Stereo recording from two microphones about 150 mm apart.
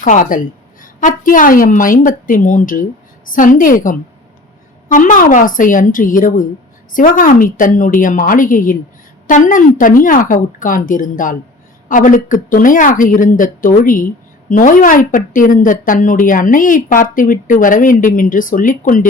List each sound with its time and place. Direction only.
0.0 s a woman's voice: 60° left (ahead or behind)